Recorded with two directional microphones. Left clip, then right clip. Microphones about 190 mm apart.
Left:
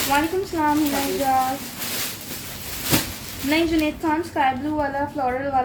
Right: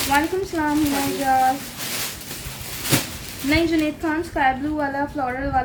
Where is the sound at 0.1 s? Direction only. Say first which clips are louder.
Right 1 dB; 30° right (ahead or behind).